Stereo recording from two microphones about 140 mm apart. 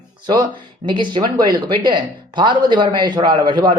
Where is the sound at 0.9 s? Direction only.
35° right (ahead or behind).